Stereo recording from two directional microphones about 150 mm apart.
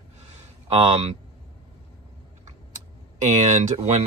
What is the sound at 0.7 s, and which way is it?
Speech, 40° right (ahead or behind).